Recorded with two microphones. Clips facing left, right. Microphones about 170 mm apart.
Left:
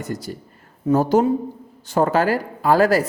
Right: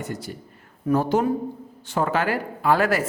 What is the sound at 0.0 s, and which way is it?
Speech, 40° left (ahead or behind).